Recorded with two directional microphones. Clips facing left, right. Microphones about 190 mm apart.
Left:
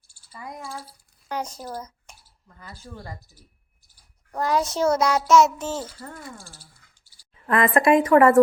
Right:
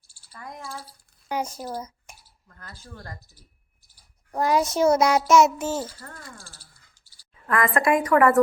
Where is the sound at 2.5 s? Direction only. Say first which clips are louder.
Left 3 dB; 10° left (ahead or behind).